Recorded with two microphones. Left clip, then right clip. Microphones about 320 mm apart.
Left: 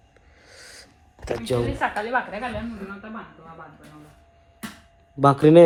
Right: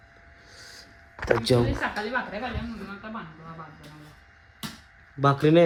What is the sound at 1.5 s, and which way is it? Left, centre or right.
Speech, right.